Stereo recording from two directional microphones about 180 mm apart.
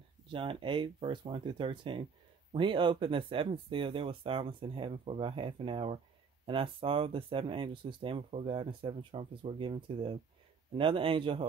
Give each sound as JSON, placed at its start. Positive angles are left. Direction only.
{"t": 0.3, "sound": "speech", "side_deg": -30}